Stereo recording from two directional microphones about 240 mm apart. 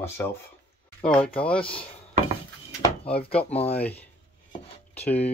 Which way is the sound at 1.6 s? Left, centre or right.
Left.